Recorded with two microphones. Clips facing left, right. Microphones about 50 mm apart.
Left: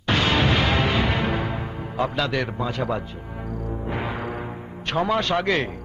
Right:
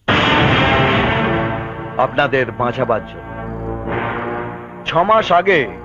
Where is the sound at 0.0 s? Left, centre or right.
Right.